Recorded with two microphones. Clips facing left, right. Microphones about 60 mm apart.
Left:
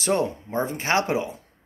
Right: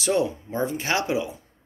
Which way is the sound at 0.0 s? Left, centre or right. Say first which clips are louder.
Even; left.